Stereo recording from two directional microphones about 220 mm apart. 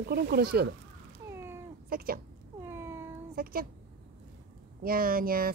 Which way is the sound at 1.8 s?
40° right (ahead or behind).